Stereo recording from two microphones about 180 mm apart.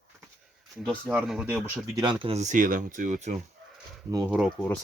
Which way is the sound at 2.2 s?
40° right (ahead or behind).